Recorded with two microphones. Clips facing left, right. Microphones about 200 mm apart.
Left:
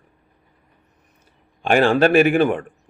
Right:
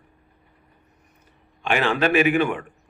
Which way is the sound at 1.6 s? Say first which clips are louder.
Left 6 dB; 45° left (ahead or behind).